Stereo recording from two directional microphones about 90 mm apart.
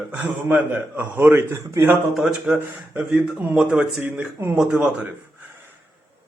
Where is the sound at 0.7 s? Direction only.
20° right (ahead or behind).